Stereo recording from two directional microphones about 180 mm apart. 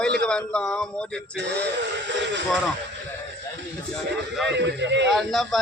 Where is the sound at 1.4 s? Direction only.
70° right (ahead or behind).